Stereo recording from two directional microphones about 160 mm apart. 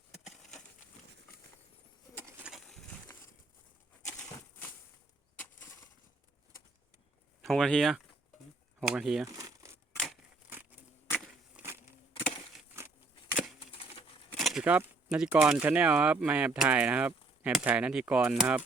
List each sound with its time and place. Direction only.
2.4 s a sound: centre (ahead or behind)
7.4 s speech: 5° left (ahead or behind)
9.2 s crumpling: 20° right (ahead or behind)
11.1 s walk: centre (ahead or behind)
13.7 s patter: 40° left (ahead or behind)
14.3 s a sound: centre (ahead or behind)
15.4 s speech: 5° right (ahead or behind)